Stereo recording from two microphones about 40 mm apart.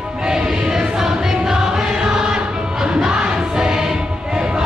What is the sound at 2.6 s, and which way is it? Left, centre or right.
Music, right.